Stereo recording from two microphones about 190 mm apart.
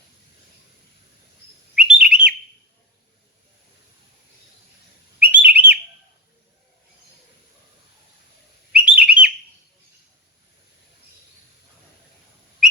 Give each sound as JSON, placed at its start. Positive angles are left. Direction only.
{"t": 1.7, "sound": "bird", "side_deg": -5}
{"t": 5.2, "sound": "bird", "side_deg": -10}
{"t": 8.7, "sound": "bird", "side_deg": -5}